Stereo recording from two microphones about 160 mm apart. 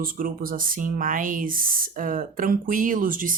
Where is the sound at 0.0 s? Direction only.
60° right (ahead or behind).